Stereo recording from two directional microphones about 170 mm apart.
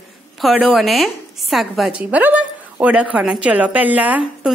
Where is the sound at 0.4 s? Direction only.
5° right (ahead or behind).